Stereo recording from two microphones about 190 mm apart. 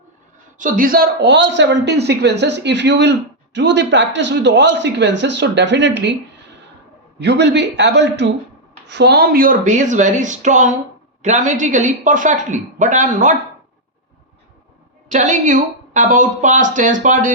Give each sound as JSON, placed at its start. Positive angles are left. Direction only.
{"t": 0.6, "sound": "a man's voice", "side_deg": -45}
{"t": 6.0, "sound": "a sound", "side_deg": -70}
{"t": 7.2, "sound": "a man's voice", "side_deg": -65}
{"t": 15.1, "sound": "a woman's voice", "side_deg": -40}